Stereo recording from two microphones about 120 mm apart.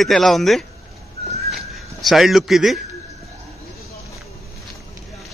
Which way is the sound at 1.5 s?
Centre (ahead or behind).